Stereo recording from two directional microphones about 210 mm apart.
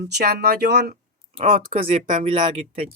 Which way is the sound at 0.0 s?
50° right (ahead or behind).